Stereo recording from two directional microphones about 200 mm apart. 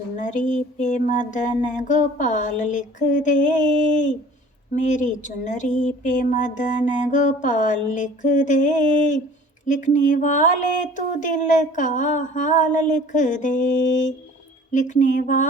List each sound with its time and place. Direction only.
0.2 s speech: 40° left (ahead or behind)